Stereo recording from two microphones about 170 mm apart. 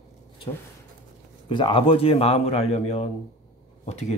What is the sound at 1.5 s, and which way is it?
Speech, 30° left (ahead or behind).